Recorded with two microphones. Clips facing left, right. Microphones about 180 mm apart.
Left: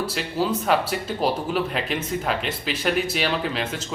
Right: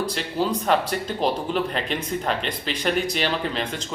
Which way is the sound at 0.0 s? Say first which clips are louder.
Even; 5° left (ahead or behind).